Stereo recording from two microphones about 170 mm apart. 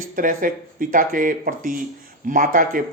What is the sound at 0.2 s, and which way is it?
Speech, 55° right (ahead or behind).